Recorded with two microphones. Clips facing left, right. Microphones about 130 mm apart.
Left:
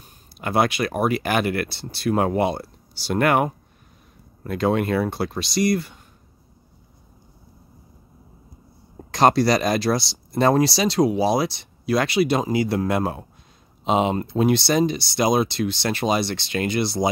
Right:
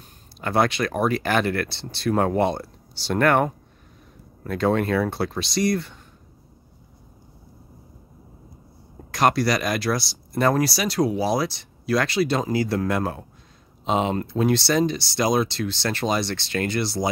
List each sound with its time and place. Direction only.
0.4 s speech: 10° left (ahead or behind)
9.1 s speech: 30° left (ahead or behind)